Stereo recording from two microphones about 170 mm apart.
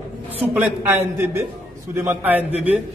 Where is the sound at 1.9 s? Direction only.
15° right (ahead or behind).